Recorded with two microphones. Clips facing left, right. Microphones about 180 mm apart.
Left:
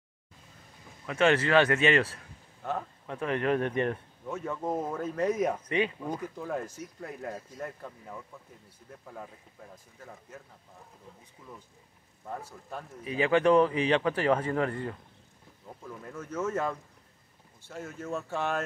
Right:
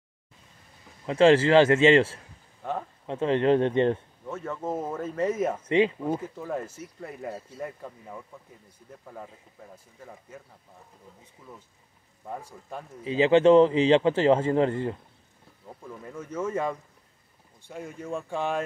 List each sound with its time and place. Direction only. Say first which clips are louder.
1.0 s speech: right 6 dB; 30° right (ahead or behind)
2.6 s speech: right 2 dB; centre (ahead or behind)
3.1 s speech: right 6 dB; 25° right (ahead or behind)
4.3 s speech: right 1 dB; centre (ahead or behind)
12.3 s speech: right 2 dB; 10° right (ahead or behind)
13.0 s speech: right 6 dB; 25° right (ahead or behind)
15.6 s speech: right 2 dB; 5° right (ahead or behind)
17.6 s speech: right 2 dB; centre (ahead or behind)
17.8 s speech: right 1 dB; 10° right (ahead or behind)
18.3 s speech: right 3 dB; 5° left (ahead or behind)